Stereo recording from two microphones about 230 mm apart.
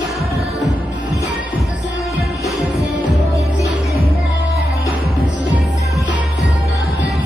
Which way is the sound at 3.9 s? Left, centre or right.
Left.